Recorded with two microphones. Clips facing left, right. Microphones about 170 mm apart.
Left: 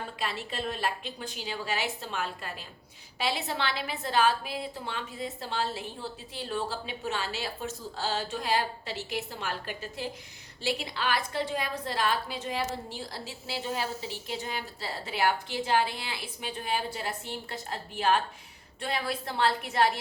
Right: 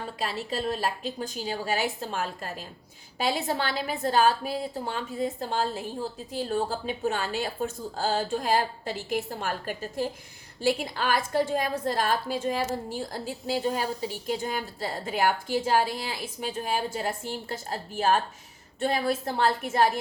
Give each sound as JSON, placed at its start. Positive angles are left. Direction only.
{"t": 0.2, "sound": "a woman's voice", "side_deg": -40}
{"t": 14.3, "sound": "a woman's voice", "side_deg": -45}